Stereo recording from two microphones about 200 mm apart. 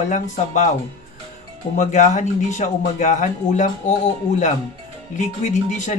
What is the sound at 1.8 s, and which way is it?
Speech, 35° left (ahead or behind).